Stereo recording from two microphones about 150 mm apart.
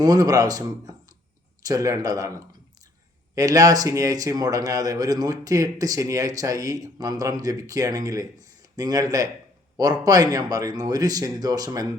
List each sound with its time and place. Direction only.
0.0 s speech: 25° right (ahead or behind)
3.3 s speech: 25° right (ahead or behind)